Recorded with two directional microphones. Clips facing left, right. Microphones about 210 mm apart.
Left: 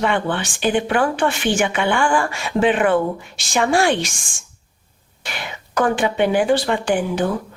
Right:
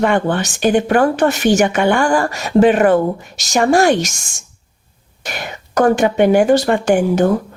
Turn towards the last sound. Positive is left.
turn(degrees=-45)  # may be behind; listen again after turning